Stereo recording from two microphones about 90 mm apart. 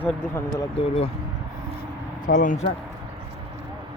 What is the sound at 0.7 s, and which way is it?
Speech, 90° left.